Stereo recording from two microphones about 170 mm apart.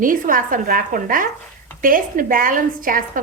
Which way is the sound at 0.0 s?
55° right (ahead or behind).